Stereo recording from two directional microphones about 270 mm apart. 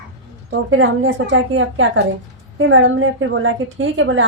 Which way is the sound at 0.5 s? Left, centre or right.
Right.